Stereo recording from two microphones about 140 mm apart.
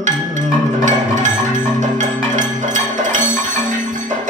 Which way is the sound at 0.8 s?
65° right (ahead or behind).